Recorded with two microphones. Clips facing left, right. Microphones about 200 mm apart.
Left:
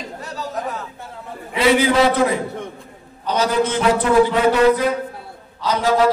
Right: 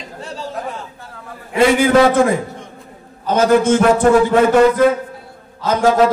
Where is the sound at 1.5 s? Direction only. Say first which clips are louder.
Right 4 dB; 50° right (ahead or behind).